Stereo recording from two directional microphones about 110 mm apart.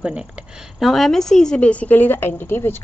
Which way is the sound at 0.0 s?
10° right (ahead or behind).